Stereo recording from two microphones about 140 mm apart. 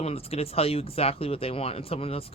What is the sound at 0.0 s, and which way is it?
Speech, 45° left (ahead or behind).